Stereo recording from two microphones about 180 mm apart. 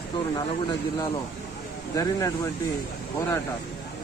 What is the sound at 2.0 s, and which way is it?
Speech, 20° left (ahead or behind).